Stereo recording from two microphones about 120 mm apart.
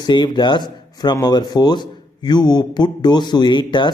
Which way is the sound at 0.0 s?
35° left (ahead or behind).